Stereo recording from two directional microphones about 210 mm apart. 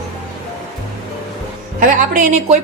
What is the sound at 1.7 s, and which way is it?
Speech, 40° right (ahead or behind).